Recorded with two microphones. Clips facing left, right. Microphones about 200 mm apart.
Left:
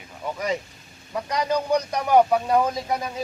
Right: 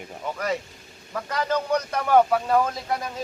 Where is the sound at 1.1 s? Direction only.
15° left (ahead or behind).